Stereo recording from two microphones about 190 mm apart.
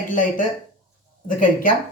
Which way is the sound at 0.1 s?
45° left (ahead or behind).